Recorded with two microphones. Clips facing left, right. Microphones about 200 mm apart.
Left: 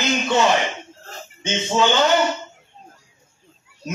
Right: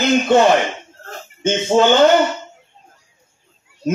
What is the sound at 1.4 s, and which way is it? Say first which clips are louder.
Speech: right 6 dB; 50° right (ahead or behind).